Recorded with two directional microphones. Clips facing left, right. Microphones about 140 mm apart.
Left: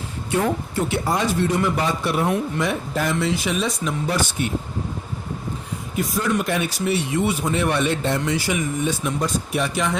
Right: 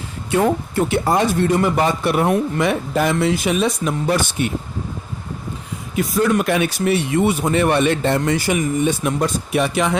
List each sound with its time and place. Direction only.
0.8 s a man's voice: 55° right (ahead or behind)
6.3 s a man's voice: 70° right (ahead or behind)